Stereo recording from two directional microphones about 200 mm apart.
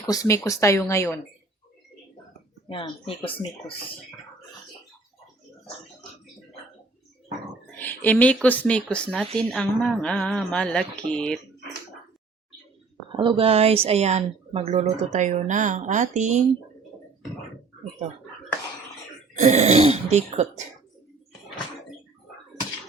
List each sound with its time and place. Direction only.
0.0 s speech: 15° left (ahead or behind)
2.6 s speech: 25° left (ahead or behind)
7.8 s speech: 10° left (ahead or behind)
13.1 s speech: 25° right (ahead or behind)
19.4 s speech: 35° right (ahead or behind)